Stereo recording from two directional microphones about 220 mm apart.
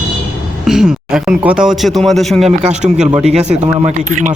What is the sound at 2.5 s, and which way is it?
Speech, 30° right (ahead or behind).